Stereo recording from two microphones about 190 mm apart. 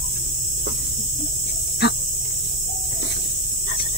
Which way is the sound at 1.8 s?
60° left (ahead or behind).